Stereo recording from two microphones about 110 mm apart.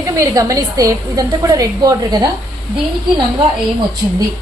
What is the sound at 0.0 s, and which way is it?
A woman's voice, 30° right (ahead or behind).